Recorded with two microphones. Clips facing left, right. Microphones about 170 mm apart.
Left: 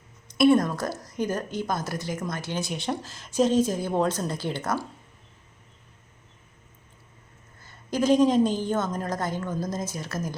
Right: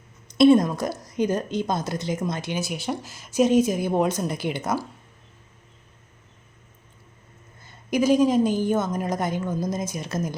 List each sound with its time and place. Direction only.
0.3 s a woman's voice: 20° right (ahead or behind)
2.6 s a woman's voice: 5° right (ahead or behind)
7.6 s a woman's voice: 15° right (ahead or behind)